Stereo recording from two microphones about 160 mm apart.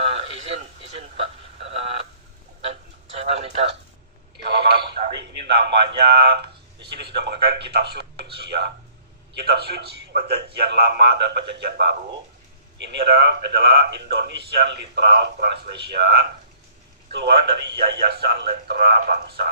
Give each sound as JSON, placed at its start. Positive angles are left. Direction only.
{"t": 0.0, "sound": "radio", "side_deg": -40}
{"t": 2.6, "sound": "a sound", "side_deg": -40}
{"t": 4.4, "sound": "a sound", "side_deg": -90}
{"t": 6.9, "sound": "a man's voice", "side_deg": -90}
{"t": 11.6, "sound": "a man's voice", "side_deg": -80}
{"t": 12.7, "sound": "a man's voice", "side_deg": -90}